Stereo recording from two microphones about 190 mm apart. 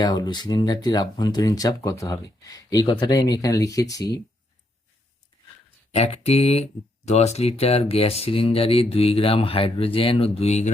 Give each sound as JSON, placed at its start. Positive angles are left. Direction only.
{"t": 0.0, "sound": "speech", "side_deg": 20}
{"t": 5.9, "sound": "speech", "side_deg": 35}